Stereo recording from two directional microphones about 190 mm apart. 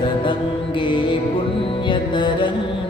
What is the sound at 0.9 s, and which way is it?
Music, 25° left (ahead or behind).